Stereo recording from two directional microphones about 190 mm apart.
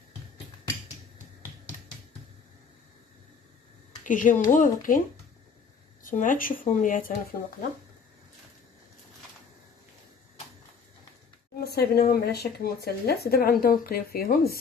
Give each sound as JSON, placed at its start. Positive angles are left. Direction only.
{"t": 4.0, "sound": "speech", "side_deg": 45}
{"t": 6.0, "sound": "speech", "side_deg": 45}
{"t": 11.6, "sound": "speech", "side_deg": 55}